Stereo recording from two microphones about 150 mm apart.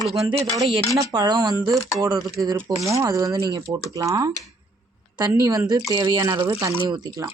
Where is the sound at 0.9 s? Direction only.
25° right (ahead or behind).